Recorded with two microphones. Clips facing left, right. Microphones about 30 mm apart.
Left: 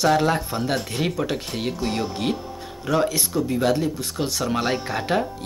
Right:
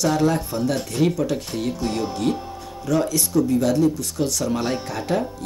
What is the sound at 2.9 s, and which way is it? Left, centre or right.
Speech, left.